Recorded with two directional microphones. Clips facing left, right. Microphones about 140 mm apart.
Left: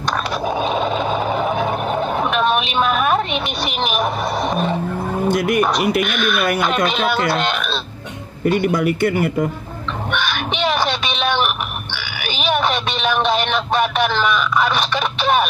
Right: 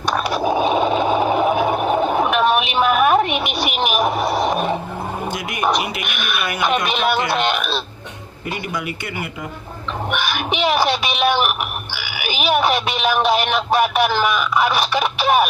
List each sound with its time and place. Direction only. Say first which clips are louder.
0.3 s a sound: right 4 dB; 10° right (ahead or behind)
5.6 s speech: left 4 dB; 10° right (ahead or behind)
8.5 s speech: left 9 dB; 50° left (ahead or behind)
10.1 s crow: even; 10° right (ahead or behind)
12.2 s speech: right 1 dB; 10° right (ahead or behind)